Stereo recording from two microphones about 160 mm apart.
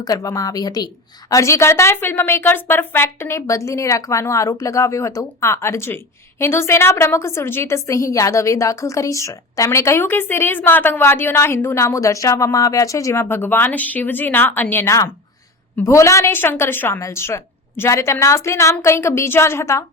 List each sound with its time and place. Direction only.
0.0 s a woman's voice: 20° left (ahead or behind)